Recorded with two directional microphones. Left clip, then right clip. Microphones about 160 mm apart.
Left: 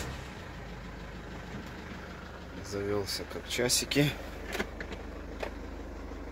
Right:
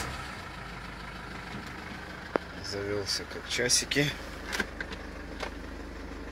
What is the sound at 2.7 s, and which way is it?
Speech, 20° left (ahead or behind).